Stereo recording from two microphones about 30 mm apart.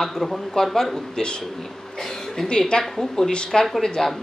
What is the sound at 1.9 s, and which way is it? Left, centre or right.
Cough, centre.